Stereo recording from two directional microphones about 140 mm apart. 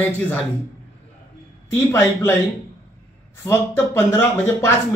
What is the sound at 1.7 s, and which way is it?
Speech, 20° left (ahead or behind).